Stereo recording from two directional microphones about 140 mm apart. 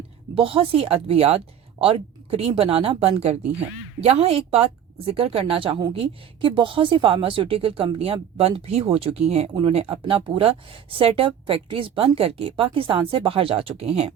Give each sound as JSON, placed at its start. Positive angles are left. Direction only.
{"t": 0.3, "sound": "a woman's voice", "side_deg": -40}